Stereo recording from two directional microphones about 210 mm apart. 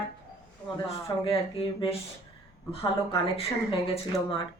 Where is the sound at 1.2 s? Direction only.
25° left (ahead or behind).